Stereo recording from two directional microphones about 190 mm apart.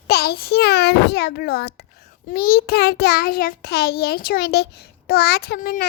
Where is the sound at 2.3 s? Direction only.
50° left (ahead or behind).